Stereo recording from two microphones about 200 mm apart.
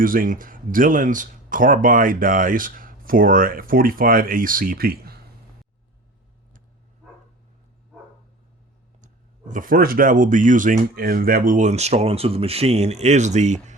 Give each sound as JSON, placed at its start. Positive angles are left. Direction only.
{"t": 0.0, "sound": "speech", "side_deg": -45}
{"t": 9.5, "sound": "speech", "side_deg": -45}